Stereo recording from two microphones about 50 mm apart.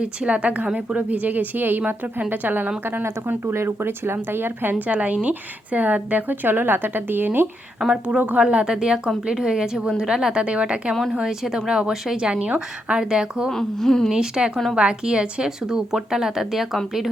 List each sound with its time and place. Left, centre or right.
0.0 s a woman's voice: right
4.9 s a woman's voice: right
7.8 s speech: centre
8.4 s speech: right
10.3 s speech: right
13.5 s a woman's voice: centre
14.1 s speech: centre
14.5 s speech: centre
14.8 s speech: centre